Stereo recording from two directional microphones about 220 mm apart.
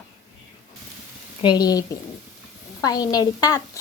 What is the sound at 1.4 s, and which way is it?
Speech, 20° left (ahead or behind).